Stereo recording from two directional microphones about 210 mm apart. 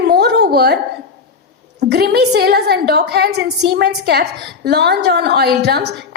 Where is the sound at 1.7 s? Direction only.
50° right (ahead or behind).